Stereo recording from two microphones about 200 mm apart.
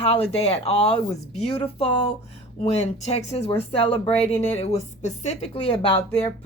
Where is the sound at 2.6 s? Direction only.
30° left (ahead or behind).